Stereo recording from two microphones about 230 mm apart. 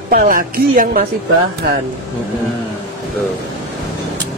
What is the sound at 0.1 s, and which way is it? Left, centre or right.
Speech, right.